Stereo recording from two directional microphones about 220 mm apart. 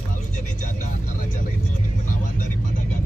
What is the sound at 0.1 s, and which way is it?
Vehicle, 35° left (ahead or behind).